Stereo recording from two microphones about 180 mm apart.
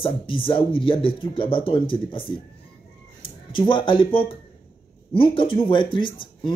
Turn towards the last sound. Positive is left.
turn(degrees=25)  # may be behind; listen again after turning